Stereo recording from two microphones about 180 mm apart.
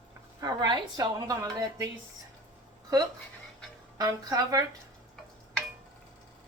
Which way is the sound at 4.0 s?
20° right (ahead or behind).